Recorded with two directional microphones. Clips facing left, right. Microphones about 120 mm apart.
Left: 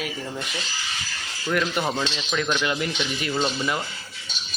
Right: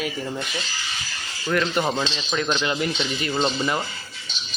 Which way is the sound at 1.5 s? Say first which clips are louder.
Right 2 dB; 5° left (ahead or behind).